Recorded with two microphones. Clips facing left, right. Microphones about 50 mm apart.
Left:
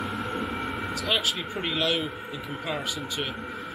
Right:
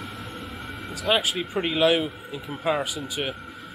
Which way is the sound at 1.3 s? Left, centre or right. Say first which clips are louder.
Right 4 dB; centre.